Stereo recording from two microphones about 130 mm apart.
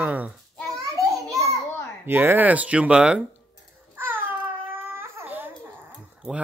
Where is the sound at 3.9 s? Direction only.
15° right (ahead or behind).